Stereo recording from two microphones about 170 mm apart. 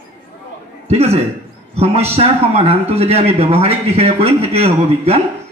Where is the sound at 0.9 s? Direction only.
40° right (ahead or behind).